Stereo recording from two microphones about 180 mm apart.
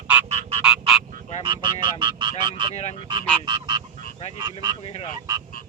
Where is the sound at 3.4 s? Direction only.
25° right (ahead or behind).